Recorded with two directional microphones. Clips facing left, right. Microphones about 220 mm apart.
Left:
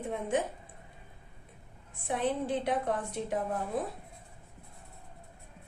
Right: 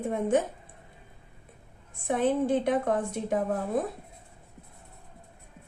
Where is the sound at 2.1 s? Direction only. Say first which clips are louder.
Right 6 dB; 50° right (ahead or behind).